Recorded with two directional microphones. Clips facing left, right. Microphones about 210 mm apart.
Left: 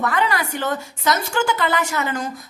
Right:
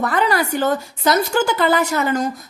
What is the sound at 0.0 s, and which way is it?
A woman's voice, 35° right (ahead or behind).